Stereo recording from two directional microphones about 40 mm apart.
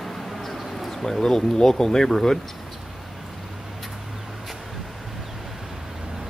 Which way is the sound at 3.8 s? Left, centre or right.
Centre.